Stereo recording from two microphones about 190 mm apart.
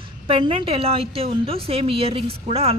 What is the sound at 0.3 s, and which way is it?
A woman's voice, 30° right (ahead or behind).